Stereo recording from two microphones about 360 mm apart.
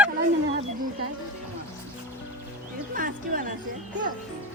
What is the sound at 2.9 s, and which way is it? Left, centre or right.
Music, right.